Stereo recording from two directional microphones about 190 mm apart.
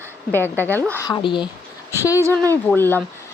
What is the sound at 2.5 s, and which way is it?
Speech, 10° left (ahead or behind).